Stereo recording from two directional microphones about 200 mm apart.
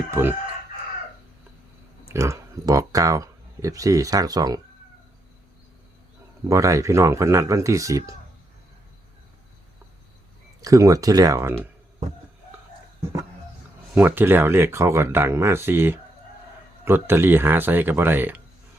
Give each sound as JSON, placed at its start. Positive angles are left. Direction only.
{"t": 0.1, "sound": "chicken", "side_deg": -10}
{"t": 2.0, "sound": "speech", "side_deg": -15}
{"t": 6.5, "sound": "speech", "side_deg": -15}
{"t": 10.6, "sound": "speech", "side_deg": -15}
{"t": 13.9, "sound": "speech", "side_deg": -10}